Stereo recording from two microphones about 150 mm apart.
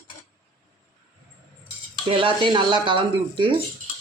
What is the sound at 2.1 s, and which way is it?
Speech, 35° right (ahead or behind).